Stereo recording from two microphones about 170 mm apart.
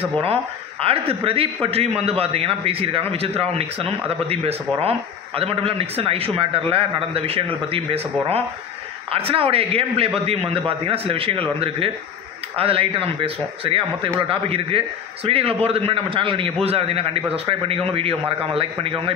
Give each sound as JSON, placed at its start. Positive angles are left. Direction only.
{"t": 0.2, "sound": "speech", "side_deg": -35}